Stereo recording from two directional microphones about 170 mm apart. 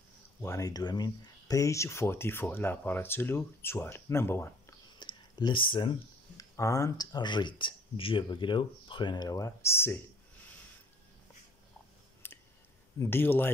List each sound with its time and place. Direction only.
0.4 s speech: 20° left (ahead or behind)
4.9 s speech: 25° left (ahead or behind)
12.2 s a sound: 15° left (ahead or behind)
13.0 s speech: 10° left (ahead or behind)